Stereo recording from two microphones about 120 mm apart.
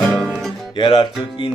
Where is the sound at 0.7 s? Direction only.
40° left (ahead or behind).